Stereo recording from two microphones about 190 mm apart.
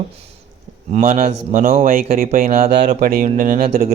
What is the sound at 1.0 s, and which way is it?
Speech, 35° right (ahead or behind).